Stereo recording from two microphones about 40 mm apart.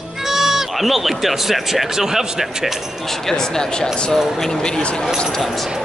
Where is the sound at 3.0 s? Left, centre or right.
Centre.